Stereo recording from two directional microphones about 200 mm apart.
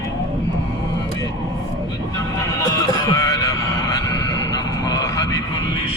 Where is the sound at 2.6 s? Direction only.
15° left (ahead or behind).